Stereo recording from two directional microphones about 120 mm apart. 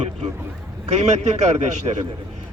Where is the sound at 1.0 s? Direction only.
70° right (ahead or behind).